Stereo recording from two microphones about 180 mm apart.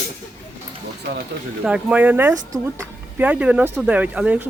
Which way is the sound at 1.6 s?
5° right (ahead or behind).